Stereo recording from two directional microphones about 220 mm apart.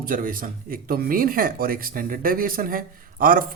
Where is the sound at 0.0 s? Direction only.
40° right (ahead or behind).